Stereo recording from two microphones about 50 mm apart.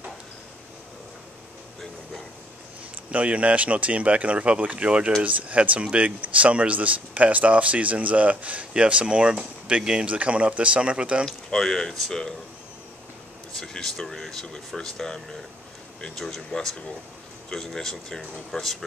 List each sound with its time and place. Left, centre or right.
3.1 s speech: right
11.2 s speech: centre
13.6 s speech: centre